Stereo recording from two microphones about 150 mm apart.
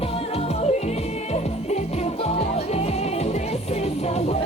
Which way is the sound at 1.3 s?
45° left (ahead or behind).